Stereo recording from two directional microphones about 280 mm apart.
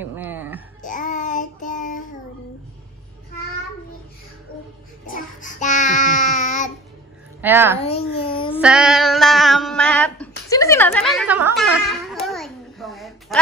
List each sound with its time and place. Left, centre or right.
0.0 s a sound: centre
0.8 s child singing: left
5.0 s child singing: left
7.4 s a woman's voice: centre
7.8 s babbling: centre
8.5 s a sound: centre